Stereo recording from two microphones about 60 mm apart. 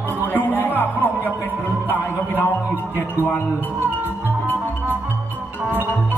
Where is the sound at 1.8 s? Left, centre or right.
Left.